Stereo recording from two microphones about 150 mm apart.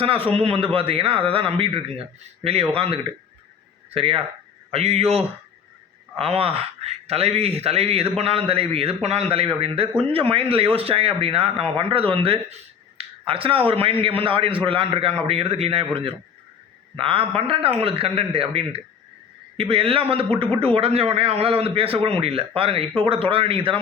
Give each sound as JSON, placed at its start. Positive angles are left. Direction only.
{"t": 0.0, "sound": "a man's voice", "side_deg": -40}